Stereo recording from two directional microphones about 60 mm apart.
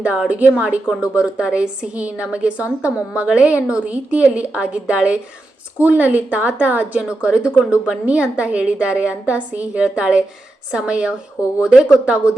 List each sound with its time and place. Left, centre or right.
0.3 s a woman's voice: right